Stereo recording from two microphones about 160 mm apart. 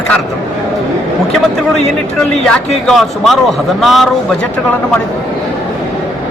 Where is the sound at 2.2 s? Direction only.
5° left (ahead or behind).